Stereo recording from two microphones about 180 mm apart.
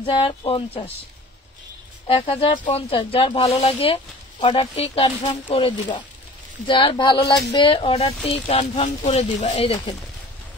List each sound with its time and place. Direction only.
0.0 s speech: 30° left (ahead or behind)
2.0 s speech: 30° left (ahead or behind)